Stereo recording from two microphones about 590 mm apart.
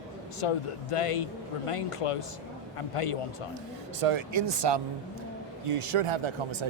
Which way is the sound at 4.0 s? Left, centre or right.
Right.